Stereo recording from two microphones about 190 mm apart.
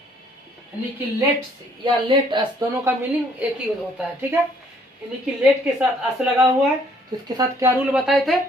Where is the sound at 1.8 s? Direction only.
25° right (ahead or behind).